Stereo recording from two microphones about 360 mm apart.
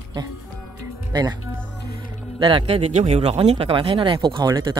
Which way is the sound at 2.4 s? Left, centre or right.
Centre.